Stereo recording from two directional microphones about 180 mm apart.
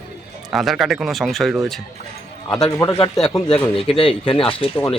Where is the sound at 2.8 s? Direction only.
25° left (ahead or behind).